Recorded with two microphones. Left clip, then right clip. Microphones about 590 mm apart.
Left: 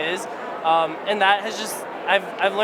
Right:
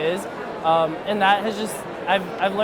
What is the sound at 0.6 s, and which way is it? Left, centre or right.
Speech, right.